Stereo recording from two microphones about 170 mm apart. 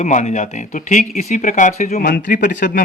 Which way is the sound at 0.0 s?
45° left (ahead or behind).